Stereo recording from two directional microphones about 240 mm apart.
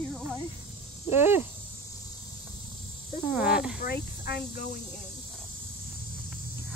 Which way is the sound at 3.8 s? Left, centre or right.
Left.